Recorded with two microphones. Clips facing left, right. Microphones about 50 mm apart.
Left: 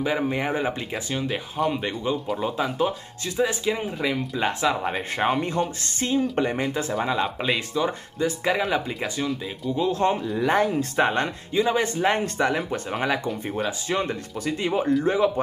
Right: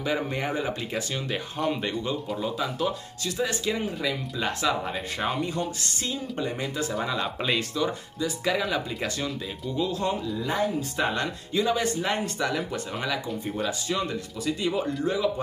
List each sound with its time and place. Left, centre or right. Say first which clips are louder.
0.0 s speech: left 3 dB; centre
1.2 s speech: left 6 dB; centre
2.3 s speech: left 4 dB; left
4.0 s speech: left 4 dB; left
6.9 s speech: left 4 dB; centre
9.8 s speech: left 5 dB; left
10.3 s speech: left 5 dB; left
11.1 s speech: left 4 dB; left
13.8 s speech: left 3 dB; left